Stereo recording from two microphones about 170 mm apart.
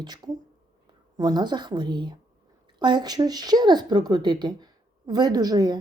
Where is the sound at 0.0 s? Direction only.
25° right (ahead or behind).